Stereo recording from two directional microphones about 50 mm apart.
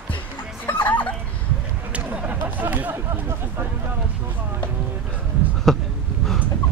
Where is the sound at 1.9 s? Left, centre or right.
Right.